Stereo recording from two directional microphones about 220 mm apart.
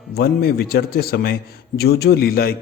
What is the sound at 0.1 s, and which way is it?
A man's voice, 45° left (ahead or behind).